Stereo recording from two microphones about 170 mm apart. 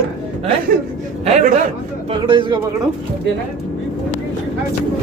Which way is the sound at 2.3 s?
30° right (ahead or behind).